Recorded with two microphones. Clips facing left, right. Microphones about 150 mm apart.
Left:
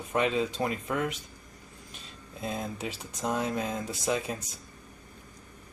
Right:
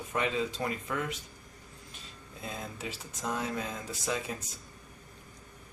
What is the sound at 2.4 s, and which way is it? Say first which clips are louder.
Speech: left 6 dB; 20° left (ahead or behind).